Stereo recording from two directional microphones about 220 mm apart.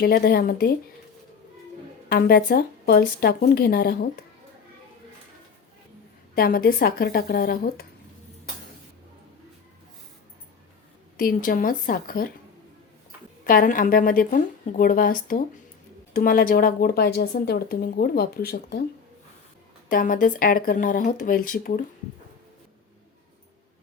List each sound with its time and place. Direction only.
0.0 s speech: 45° left (ahead or behind)
2.0 s speech: 45° left (ahead or behind)
6.3 s speech: 45° left (ahead or behind)
11.2 s a woman's voice: 40° left (ahead or behind)
13.4 s a woman's voice: 40° left (ahead or behind)
19.9 s a woman's voice: 40° left (ahead or behind)